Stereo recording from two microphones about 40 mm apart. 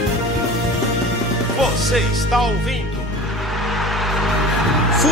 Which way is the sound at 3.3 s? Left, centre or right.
Centre.